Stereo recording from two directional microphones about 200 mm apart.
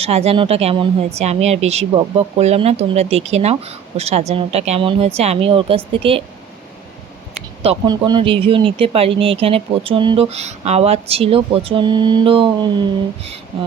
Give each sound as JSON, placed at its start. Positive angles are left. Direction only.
{"t": 0.0, "sound": "speech", "side_deg": -30}
{"t": 7.6, "sound": "speech", "side_deg": -25}